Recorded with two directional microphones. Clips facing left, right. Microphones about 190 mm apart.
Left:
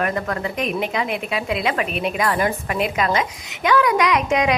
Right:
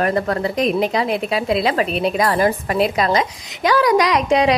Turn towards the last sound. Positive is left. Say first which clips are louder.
# right 3 dB
turn(degrees=-35)  # may be behind; listen again after turning